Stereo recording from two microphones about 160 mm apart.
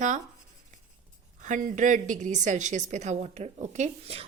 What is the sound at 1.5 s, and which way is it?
A woman's voice, 50° right (ahead or behind).